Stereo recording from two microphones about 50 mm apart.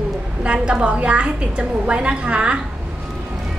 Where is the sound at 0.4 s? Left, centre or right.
Centre.